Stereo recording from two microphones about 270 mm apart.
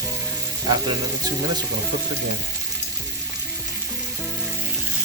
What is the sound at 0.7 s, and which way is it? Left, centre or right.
Frying, centre.